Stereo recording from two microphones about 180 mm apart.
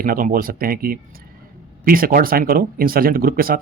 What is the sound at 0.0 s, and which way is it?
Speech, 50° right (ahead or behind).